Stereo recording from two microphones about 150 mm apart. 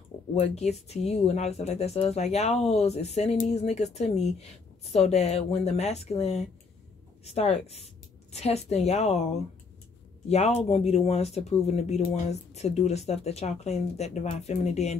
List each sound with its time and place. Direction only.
0.4 s speech: 45° left (ahead or behind)